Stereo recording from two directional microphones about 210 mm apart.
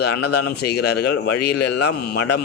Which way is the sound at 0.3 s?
50° left (ahead or behind).